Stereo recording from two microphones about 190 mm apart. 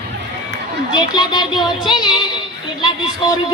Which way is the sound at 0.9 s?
25° left (ahead or behind).